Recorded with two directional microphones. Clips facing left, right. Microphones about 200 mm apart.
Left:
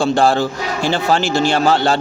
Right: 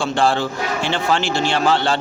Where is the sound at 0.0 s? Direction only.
40° left (ahead or behind).